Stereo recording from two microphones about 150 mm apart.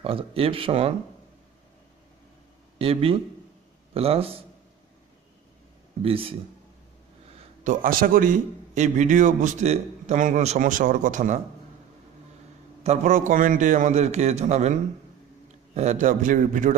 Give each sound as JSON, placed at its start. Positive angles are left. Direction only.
{"t": 0.0, "sound": "speech", "side_deg": -40}
{"t": 2.8, "sound": "speech", "side_deg": -40}
{"t": 6.0, "sound": "speech", "side_deg": -40}
{"t": 7.6, "sound": "a man's voice", "side_deg": -70}
{"t": 12.8, "sound": "a man's voice", "side_deg": -55}